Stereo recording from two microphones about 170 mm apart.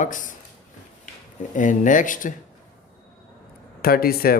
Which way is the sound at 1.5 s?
50° left (ahead or behind).